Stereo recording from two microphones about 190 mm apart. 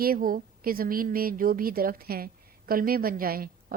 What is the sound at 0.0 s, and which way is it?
A woman's voice, 50° right (ahead or behind).